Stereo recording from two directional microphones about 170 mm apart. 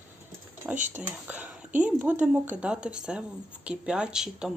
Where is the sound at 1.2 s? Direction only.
10° right (ahead or behind).